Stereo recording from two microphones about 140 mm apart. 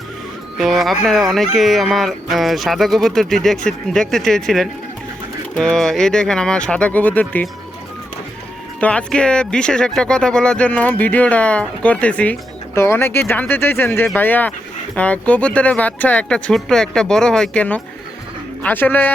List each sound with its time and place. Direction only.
0.6 s speech: centre (ahead or behind)
8.8 s speech: 10° left (ahead or behind)